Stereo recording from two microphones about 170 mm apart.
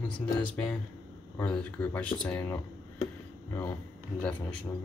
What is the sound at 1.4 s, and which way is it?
Speech, 5° left (ahead or behind).